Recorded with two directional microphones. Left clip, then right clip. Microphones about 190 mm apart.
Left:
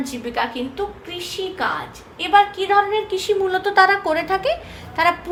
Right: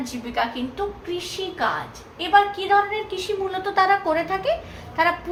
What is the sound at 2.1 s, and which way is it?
A woman's voice, 40° left (ahead or behind).